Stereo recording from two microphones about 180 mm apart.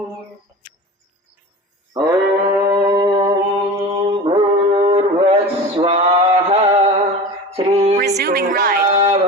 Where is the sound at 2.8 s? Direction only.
20° right (ahead or behind).